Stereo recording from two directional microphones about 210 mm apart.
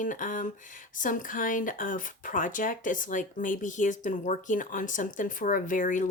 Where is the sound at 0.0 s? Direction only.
40° left (ahead or behind).